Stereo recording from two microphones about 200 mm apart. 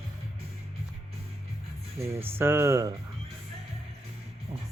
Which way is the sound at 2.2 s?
10° right (ahead or behind).